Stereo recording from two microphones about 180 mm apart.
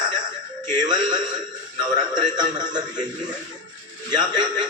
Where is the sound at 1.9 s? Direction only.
25° right (ahead or behind).